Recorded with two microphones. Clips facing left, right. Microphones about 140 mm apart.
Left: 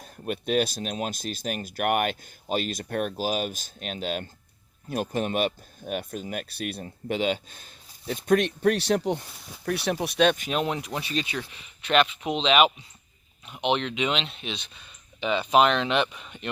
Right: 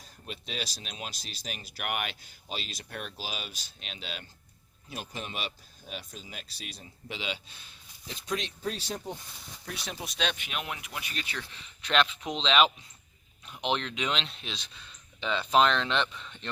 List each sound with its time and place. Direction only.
0.0 s speech: 55° left (ahead or behind); by 9.2 s 75° left (ahead or behind)
9.6 s speech: 60° left (ahead or behind); by 11.1 s 35° left (ahead or behind)
11.1 s speech: 20° left (ahead or behind)
11.5 s speech: 5° left (ahead or behind)